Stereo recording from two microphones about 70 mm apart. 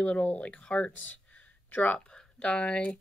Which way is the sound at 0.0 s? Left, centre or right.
Centre.